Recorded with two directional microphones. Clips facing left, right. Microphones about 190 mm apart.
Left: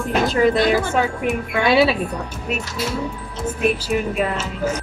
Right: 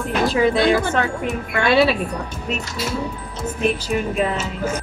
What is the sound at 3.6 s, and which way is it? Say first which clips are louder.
Speech: left 1 dB; 5° left (ahead or behind).